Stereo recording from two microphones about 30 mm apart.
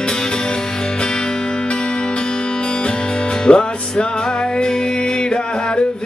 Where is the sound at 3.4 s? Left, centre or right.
Left.